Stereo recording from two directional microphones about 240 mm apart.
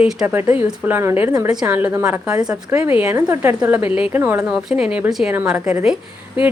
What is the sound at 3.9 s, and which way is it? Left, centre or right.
Speech, left.